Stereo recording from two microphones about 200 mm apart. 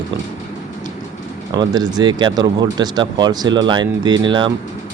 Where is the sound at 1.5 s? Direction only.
20° right (ahead or behind).